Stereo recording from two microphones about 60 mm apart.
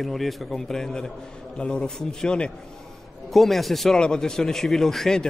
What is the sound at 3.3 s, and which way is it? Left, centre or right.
Speech, centre.